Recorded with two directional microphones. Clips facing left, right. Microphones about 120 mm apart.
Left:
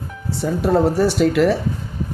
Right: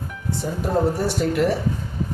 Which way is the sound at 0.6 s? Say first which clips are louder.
Left 5 dB; 75° left (ahead or behind).